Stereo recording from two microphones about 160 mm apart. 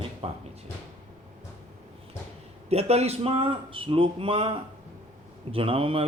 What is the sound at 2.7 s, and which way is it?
Speech, 40° right (ahead or behind).